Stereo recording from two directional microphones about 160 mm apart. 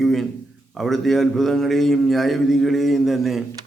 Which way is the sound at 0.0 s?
Centre (ahead or behind).